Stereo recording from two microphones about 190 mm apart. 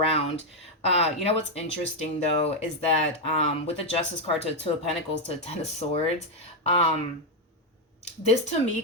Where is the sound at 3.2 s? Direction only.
30° left (ahead or behind).